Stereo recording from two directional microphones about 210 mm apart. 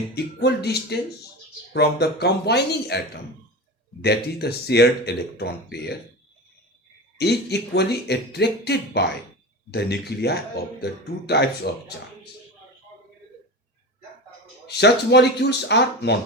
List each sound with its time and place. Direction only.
0.3 s speech: 50° left (ahead or behind)
4.0 s speech: 50° left (ahead or behind)
7.2 s speech: 50° left (ahead or behind)
14.7 s speech: 55° left (ahead or behind)